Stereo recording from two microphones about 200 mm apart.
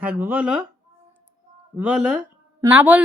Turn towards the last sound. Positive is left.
turn(degrees=-10)  # may be behind; listen again after turning